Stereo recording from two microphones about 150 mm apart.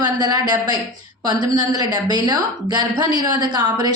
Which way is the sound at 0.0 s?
25° right (ahead or behind).